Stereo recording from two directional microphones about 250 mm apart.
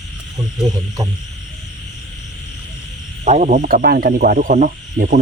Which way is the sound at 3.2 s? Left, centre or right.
Right.